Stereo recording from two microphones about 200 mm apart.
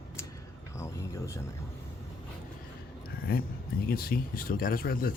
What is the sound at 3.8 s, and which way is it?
Speech, 50° left (ahead or behind).